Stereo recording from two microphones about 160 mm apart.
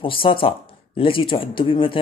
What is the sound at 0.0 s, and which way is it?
Speech, 35° left (ahead or behind).